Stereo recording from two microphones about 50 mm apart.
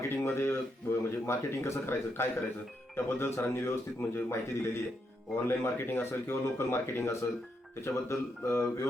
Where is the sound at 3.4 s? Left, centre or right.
Left.